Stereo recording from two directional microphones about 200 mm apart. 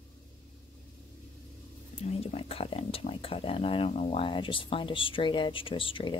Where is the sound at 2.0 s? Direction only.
30° left (ahead or behind).